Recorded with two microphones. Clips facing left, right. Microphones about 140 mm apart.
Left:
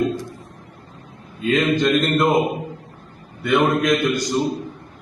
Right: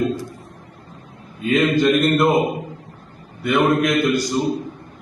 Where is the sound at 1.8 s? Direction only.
5° right (ahead or behind).